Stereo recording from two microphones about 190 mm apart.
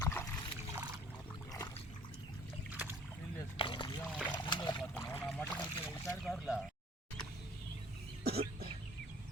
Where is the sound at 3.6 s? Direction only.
25° left (ahead or behind).